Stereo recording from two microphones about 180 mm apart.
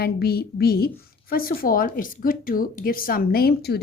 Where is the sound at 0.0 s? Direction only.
60° left (ahead or behind).